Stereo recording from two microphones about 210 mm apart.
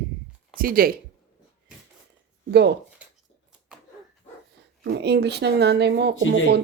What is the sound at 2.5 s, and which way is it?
Speech, 50° right (ahead or behind).